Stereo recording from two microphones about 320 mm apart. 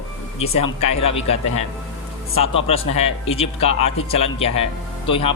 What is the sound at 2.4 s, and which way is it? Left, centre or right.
Speech, centre.